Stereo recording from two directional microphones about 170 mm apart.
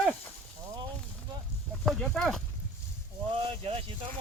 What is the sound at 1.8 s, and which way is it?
Speech, centre (ahead or behind).